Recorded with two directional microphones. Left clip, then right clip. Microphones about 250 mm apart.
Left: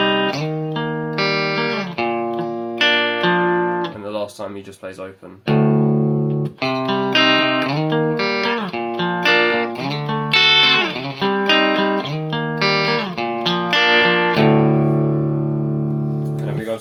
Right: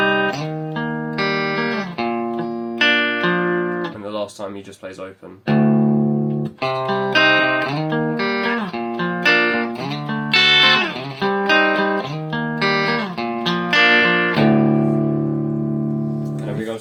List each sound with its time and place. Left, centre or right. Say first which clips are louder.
0.0 s music: even; left
5.5 s music: even; left